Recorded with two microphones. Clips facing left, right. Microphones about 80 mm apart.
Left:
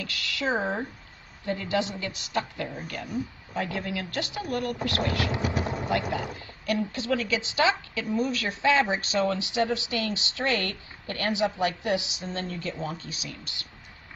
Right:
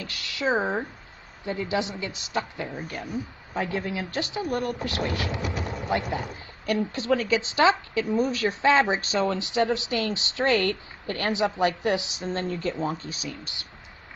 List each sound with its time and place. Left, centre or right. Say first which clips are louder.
0.0 s a woman's voice: right 2 dB; right
5.3 s a sound: left 2 dB; centre
6.1 s a woman's voice: even; right
8.2 s a woman's voice: right 2 dB; right
12.2 s speech: right 5 dB; right